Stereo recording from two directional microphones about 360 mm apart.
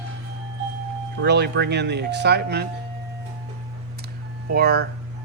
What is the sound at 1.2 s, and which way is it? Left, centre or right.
Speech, right.